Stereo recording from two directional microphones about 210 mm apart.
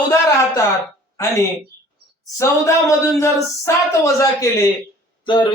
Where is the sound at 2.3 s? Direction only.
15° left (ahead or behind).